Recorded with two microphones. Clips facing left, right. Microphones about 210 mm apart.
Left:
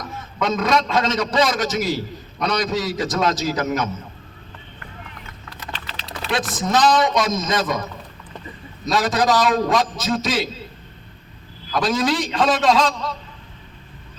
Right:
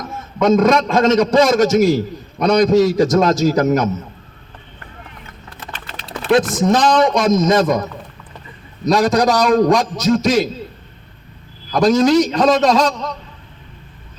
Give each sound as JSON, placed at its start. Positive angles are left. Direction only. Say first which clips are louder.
{"t": 0.4, "sound": "a man's voice", "louder": "right 7 dB", "side_deg": -45}
{"t": 5.5, "sound": "typing", "louder": "right 1 dB", "side_deg": -50}
{"t": 6.2, "sound": "a man's voice", "louder": "right 10 dB", "side_deg": -50}
{"t": 8.9, "sound": "a man's voice", "louder": "right 5 dB", "side_deg": -45}
{"t": 11.7, "sound": "a man's voice", "louder": "right 8 dB", "side_deg": -45}